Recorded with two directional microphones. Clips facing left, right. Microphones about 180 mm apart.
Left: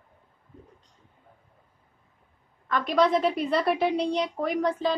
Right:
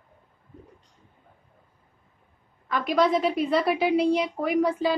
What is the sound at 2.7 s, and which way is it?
A woman's voice, 5° right (ahead or behind).